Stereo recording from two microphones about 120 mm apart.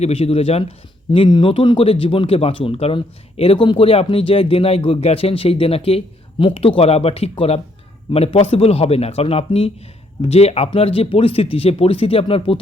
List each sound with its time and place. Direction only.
0.0 s a man's voice: 55° left (ahead or behind)
1.1 s a man's voice: 45° left (ahead or behind)